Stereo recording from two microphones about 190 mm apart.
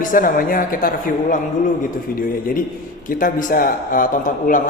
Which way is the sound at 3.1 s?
45° left (ahead or behind).